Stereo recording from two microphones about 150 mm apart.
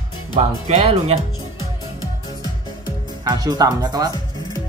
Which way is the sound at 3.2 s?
25° right (ahead or behind).